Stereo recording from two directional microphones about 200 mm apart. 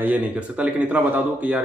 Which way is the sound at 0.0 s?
5° right (ahead or behind).